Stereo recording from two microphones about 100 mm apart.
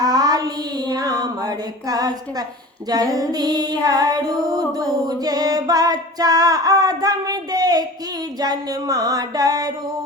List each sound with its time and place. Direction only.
0.0 s child singing: 40° right (ahead or behind)
2.9 s female singing: 40° right (ahead or behind)